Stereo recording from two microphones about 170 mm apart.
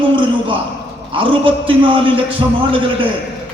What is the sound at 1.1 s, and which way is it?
A man's voice, 30° right (ahead or behind).